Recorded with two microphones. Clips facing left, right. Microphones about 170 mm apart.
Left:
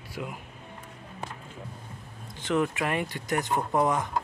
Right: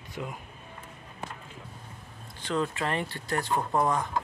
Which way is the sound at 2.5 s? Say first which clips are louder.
Left 3 dB; 15° left (ahead or behind).